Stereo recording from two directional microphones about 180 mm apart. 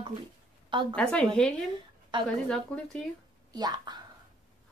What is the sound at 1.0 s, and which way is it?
Speech, 5° left (ahead or behind).